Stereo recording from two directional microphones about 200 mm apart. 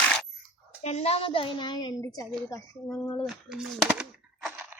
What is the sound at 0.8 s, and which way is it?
A woman's voice, 30° left (ahead or behind).